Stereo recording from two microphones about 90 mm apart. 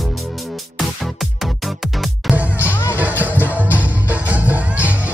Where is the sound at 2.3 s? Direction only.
15° right (ahead or behind).